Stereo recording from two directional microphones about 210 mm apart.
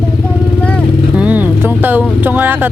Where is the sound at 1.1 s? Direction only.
5° right (ahead or behind).